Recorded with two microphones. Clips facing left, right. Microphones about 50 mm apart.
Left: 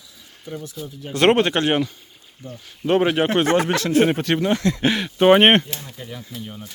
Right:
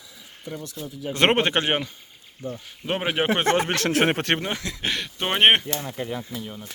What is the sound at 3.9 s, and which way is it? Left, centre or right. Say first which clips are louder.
Speech: left 5 dB; right.